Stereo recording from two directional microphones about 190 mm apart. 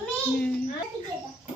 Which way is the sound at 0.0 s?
5° left (ahead or behind).